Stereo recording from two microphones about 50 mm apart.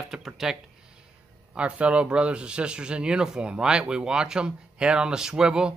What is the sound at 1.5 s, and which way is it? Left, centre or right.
Speech, right.